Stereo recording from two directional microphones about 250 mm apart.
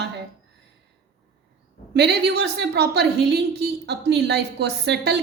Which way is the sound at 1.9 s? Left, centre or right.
Right.